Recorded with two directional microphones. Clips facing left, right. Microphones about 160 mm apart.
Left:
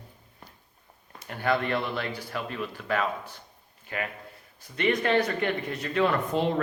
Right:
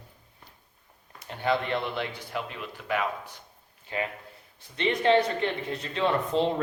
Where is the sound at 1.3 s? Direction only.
20° right (ahead or behind).